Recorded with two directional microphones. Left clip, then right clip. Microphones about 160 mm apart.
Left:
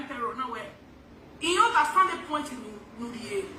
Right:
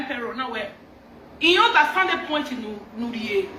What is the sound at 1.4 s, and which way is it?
Speech, 20° right (ahead or behind).